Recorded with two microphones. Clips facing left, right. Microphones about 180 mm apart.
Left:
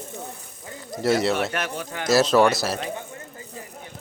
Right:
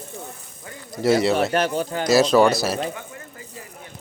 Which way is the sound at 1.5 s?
30° right (ahead or behind).